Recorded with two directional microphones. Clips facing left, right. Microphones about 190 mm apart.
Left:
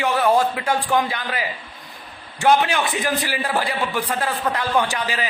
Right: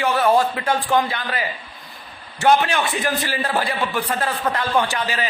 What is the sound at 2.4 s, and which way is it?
A man's voice, 15° left (ahead or behind).